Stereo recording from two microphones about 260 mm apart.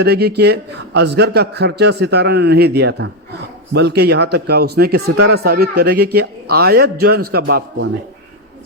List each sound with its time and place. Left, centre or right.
0.0 s a man's voice: right